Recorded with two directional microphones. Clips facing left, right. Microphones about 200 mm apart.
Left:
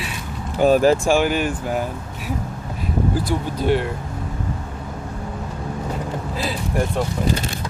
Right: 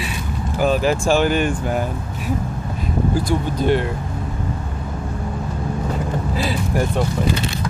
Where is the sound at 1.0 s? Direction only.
10° left (ahead or behind).